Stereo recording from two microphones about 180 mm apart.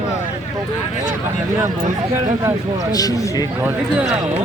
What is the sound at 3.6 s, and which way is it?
Speech, 5° right (ahead or behind).